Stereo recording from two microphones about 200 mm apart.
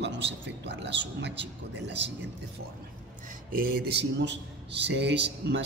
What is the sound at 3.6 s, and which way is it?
A man's voice, 50° right (ahead or behind).